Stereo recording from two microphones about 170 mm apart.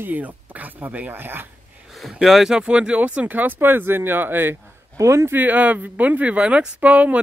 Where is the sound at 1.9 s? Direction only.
Centre (ahead or behind).